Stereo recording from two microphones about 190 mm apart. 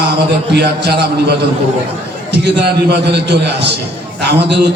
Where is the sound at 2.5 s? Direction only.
60° right (ahead or behind).